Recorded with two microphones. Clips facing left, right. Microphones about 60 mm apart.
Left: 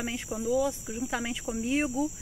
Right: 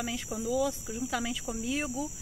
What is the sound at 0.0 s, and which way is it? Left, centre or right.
Speech, left.